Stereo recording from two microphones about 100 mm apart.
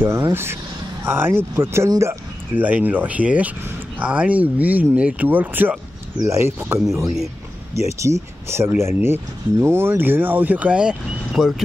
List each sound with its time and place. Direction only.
0.0 s speech: 25° right (ahead or behind)
2.5 s speech: 15° right (ahead or behind)